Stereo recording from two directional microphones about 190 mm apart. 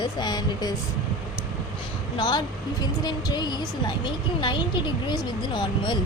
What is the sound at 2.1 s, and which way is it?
A woman's voice, 25° left (ahead or behind).